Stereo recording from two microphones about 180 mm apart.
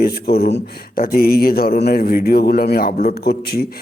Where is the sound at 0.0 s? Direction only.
60° left (ahead or behind).